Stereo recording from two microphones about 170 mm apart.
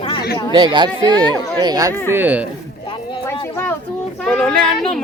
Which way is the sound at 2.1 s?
10° right (ahead or behind).